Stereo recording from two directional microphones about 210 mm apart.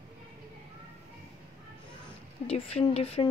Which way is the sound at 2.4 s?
30° left (ahead or behind).